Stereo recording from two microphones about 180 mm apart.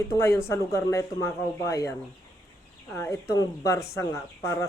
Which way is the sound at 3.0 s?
15° left (ahead or behind).